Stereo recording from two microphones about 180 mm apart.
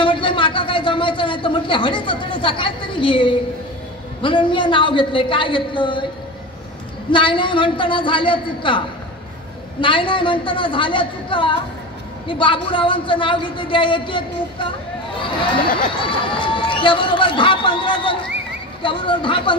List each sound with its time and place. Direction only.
0.0 s a sound: 30° left (ahead or behind)
4.2 s speech: 30° left (ahead or behind)
7.1 s speech: 25° left (ahead or behind)